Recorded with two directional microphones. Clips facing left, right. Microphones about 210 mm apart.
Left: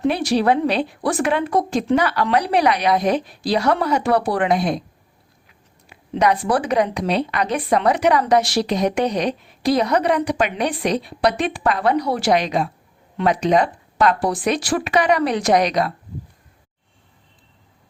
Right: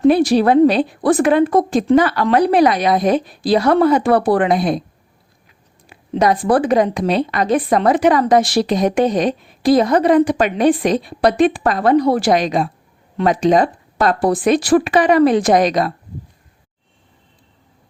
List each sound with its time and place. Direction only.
0.3 s a woman's voice: 45° right (ahead or behind)
4.4 s speech: 35° right (ahead or behind)
5.9 s a woman's voice: 50° right (ahead or behind)
14.2 s a woman's voice: 50° right (ahead or behind)
14.8 s speech: 30° right (ahead or behind)
15.4 s a woman's voice: 50° right (ahead or behind)